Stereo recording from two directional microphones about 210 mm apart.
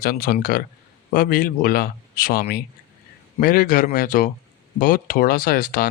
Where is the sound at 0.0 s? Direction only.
45° left (ahead or behind).